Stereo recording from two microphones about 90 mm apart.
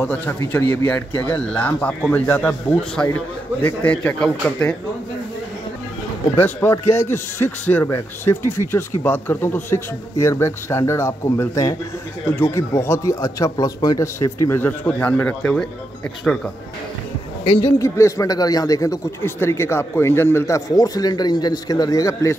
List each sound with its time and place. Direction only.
0.1 s speech: 20° left (ahead or behind)
6.3 s speech: 25° left (ahead or behind)
12.3 s speech: 25° left (ahead or behind)
13.9 s speech: 30° left (ahead or behind); by 15.6 s 10° left (ahead or behind)
17.6 s speech: 35° left (ahead or behind)
19.2 s speech: 30° left (ahead or behind)